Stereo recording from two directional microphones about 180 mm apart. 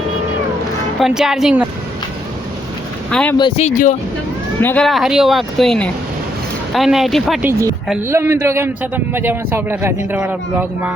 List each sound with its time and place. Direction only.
0.9 s speech: centre (ahead or behind)
3.1 s speech: 5° left (ahead or behind)
3.6 s speech: 45° left (ahead or behind)
4.6 s speech: 5° left (ahead or behind)
8.0 s a man's voice: 15° right (ahead or behind)